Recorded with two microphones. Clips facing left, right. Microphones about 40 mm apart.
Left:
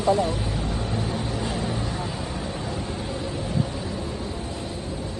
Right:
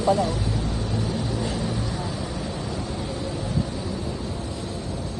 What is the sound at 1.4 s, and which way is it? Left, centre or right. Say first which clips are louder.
Vehicle: even; left.